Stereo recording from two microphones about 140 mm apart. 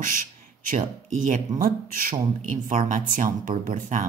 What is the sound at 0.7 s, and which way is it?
Speech, 65° right (ahead or behind).